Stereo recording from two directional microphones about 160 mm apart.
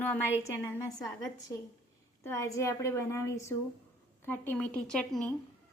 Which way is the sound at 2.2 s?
20° left (ahead or behind).